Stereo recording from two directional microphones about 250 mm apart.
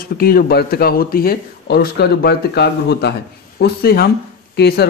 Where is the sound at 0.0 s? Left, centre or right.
Left.